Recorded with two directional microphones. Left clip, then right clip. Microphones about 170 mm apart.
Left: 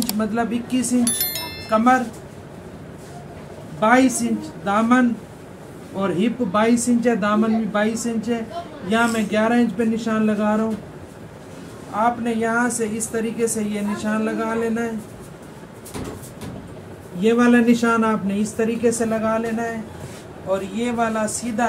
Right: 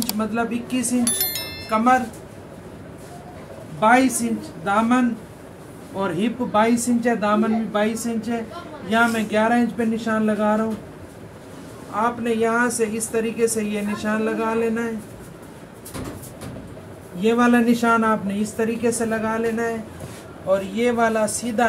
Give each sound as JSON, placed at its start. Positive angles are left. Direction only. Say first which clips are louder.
{"t": 0.0, "sound": "speech", "louder": "left 1 dB", "side_deg": 0}
{"t": 3.8, "sound": "speech", "louder": "even", "side_deg": 0}
{"t": 11.9, "sound": "a woman's voice", "louder": "left 1 dB", "side_deg": -10}
{"t": 17.2, "sound": "speech", "louder": "left 1 dB", "side_deg": 0}
{"t": 20.8, "sound": "speech", "louder": "right 4 dB", "side_deg": -25}